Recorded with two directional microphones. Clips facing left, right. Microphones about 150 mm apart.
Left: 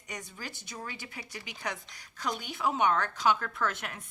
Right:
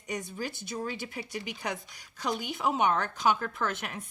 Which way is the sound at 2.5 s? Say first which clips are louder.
Even; 15° right (ahead or behind).